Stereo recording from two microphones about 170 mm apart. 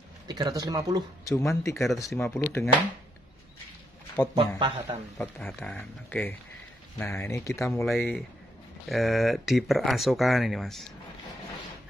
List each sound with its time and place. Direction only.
0.3 s speech: 25° right (ahead or behind)
1.3 s speech: 15° left (ahead or behind)
4.6 s speech: 30° right (ahead or behind)
5.1 s speech: 5° left (ahead or behind)
7.8 s speech: centre (ahead or behind)